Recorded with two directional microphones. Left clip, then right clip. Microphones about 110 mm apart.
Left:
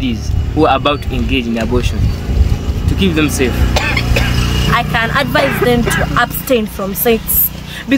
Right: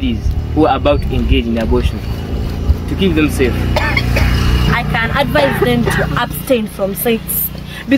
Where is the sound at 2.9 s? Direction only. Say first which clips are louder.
Even; 30° left (ahead or behind).